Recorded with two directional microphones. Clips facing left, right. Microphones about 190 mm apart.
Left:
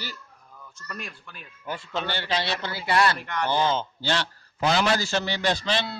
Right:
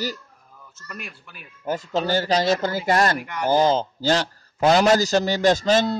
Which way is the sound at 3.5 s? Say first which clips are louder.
Right 7 dB; 40° right (ahead or behind).